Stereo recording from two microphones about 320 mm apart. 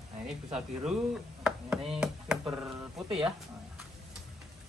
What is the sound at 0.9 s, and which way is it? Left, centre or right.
Speech, centre.